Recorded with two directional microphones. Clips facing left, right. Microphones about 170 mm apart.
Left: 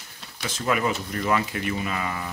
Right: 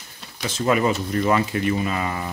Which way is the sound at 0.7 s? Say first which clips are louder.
Right 5 dB; 30° right (ahead or behind).